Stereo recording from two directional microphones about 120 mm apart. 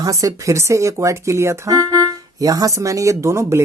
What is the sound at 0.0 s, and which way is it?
Speech, 30° right (ahead or behind).